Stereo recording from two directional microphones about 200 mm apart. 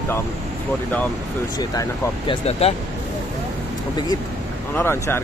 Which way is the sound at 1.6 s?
20° left (ahead or behind).